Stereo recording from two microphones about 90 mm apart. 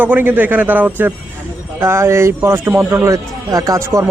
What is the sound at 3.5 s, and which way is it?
Speech, 40° right (ahead or behind).